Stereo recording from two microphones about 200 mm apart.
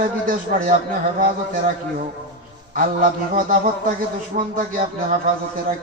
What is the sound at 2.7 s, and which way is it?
A man's voice, 45° right (ahead or behind).